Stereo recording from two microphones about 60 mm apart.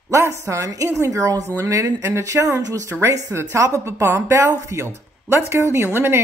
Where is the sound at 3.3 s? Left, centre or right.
Right.